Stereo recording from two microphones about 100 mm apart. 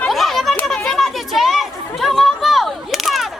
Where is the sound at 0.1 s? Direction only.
Centre (ahead or behind).